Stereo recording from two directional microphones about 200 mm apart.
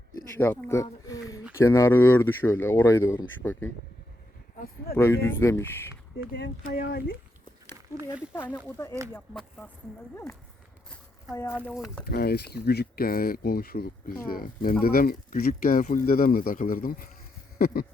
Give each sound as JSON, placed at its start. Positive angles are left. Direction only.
{"t": 0.2, "sound": "speech", "side_deg": 10}
{"t": 4.9, "sound": "speech", "side_deg": 15}
{"t": 6.3, "sound": "speech", "side_deg": 55}
{"t": 8.5, "sound": "speech", "side_deg": 10}
{"t": 9.3, "sound": "speech", "side_deg": 0}
{"t": 11.7, "sound": "speech", "side_deg": 0}
{"t": 12.0, "sound": "speech", "side_deg": 50}